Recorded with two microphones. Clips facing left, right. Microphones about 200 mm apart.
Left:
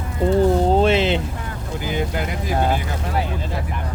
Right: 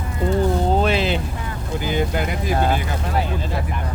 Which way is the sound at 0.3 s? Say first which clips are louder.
Left 3 dB; 30° left (ahead or behind).